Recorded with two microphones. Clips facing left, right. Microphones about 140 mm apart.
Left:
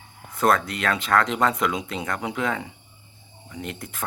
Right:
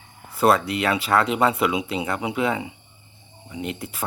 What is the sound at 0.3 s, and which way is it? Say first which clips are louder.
Speech: right 3 dB; 10° right (ahead or behind).